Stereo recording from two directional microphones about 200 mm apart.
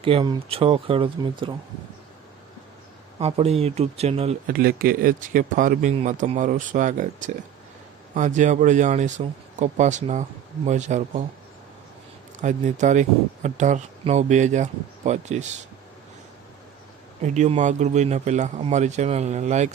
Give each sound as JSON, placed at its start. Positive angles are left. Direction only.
{"t": 0.0, "sound": "speech", "side_deg": -25}
{"t": 3.2, "sound": "speech", "side_deg": -30}
{"t": 4.4, "sound": "speech", "side_deg": -45}
{"t": 12.4, "sound": "speech", "side_deg": -40}
{"t": 17.2, "sound": "speech", "side_deg": -35}